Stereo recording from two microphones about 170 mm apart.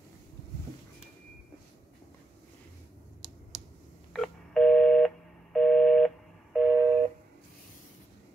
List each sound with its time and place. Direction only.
4.1 s telephone dialing: centre (ahead or behind)